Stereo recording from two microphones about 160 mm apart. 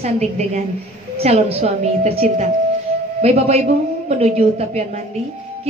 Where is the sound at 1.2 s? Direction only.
40° right (ahead or behind).